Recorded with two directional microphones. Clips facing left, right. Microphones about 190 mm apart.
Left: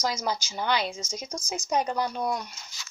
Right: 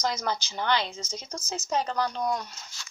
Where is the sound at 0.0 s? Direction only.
10° left (ahead or behind).